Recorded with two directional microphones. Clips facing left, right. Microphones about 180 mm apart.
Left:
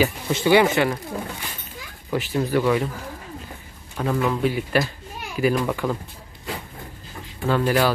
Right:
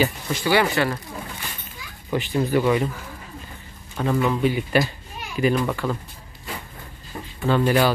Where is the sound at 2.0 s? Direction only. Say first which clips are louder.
Right 1 dB; centre (ahead or behind).